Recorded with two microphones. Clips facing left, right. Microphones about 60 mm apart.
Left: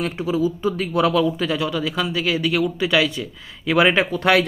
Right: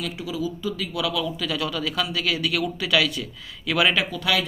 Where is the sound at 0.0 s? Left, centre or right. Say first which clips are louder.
Left 7 dB; left.